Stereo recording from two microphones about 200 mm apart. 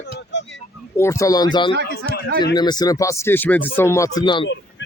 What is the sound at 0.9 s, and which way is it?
Speech, 15° left (ahead or behind).